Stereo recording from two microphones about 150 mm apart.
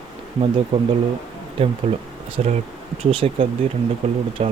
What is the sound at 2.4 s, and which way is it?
Speech, 50° right (ahead or behind).